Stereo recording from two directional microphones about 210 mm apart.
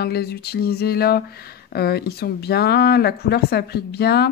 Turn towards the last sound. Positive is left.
turn(degrees=50)  # may be behind; listen again after turning